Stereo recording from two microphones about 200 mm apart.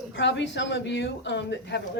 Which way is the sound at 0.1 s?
65° left (ahead or behind).